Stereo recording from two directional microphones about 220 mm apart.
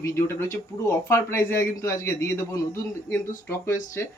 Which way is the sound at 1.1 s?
10° left (ahead or behind).